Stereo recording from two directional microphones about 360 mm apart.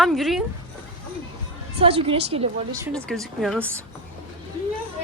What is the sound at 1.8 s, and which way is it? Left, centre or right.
A woman's voice, centre.